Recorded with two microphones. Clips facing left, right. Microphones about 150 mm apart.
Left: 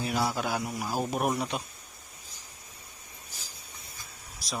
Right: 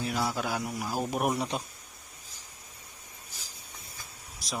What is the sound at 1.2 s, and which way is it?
Speech, 15° right (ahead or behind).